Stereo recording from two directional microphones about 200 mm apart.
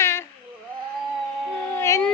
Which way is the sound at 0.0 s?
15° left (ahead or behind).